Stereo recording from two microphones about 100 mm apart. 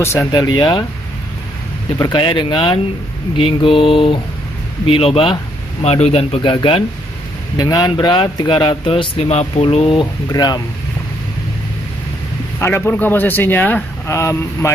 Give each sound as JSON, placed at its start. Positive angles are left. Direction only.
{"t": 0.0, "sound": "speech", "side_deg": 30}
{"t": 0.3, "sound": "speech", "side_deg": 45}
{"t": 2.1, "sound": "speech", "side_deg": 55}
{"t": 6.5, "sound": "speech", "side_deg": 60}
{"t": 7.5, "sound": "speech", "side_deg": 40}
{"t": 9.9, "sound": "speech", "side_deg": 40}
{"t": 12.5, "sound": "speech", "side_deg": 25}